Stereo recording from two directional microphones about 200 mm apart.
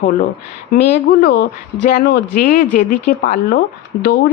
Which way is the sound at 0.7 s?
45° left (ahead or behind).